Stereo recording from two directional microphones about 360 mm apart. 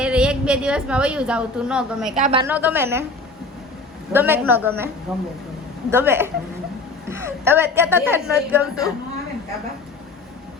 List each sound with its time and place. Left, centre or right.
0.0 s a woman's voice: centre
2.1 s a woman's voice: right
2.4 s a woman's voice: centre
4.1 s a woman's voice: centre